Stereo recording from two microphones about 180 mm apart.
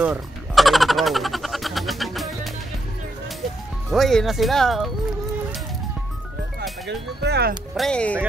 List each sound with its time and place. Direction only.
0.0 s music: 5° right (ahead or behind)
3.9 s speech: centre (ahead or behind)
6.9 s speech: 65° right (ahead or behind)
7.7 s speech: 5° left (ahead or behind)